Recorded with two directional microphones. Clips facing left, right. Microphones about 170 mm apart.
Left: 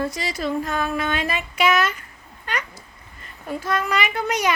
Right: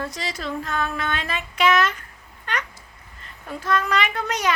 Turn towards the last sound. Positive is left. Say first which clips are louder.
# left 2 dB
turn(degrees=10)  # may be behind; listen again after turning